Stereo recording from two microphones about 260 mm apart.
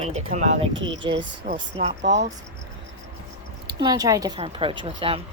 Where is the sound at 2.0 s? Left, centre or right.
Right.